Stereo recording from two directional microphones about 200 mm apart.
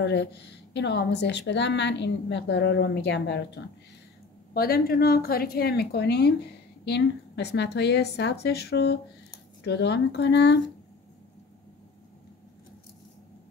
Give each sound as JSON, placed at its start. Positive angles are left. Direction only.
{"t": 0.0, "sound": "a woman's voice", "side_deg": 55}